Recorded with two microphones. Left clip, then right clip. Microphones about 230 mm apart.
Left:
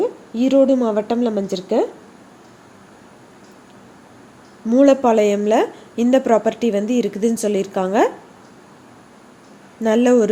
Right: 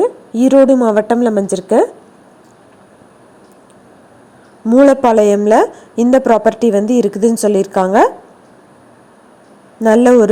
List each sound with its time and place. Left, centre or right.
0.0 s speech: right
4.6 s speech: right
9.8 s speech: right